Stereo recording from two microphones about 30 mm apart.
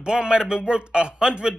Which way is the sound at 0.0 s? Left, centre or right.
Right.